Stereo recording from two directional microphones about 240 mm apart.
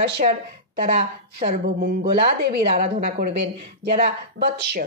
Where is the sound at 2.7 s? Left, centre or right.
Right.